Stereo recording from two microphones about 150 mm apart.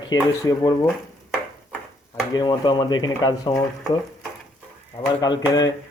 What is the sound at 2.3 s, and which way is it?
Speech, 30° left (ahead or behind).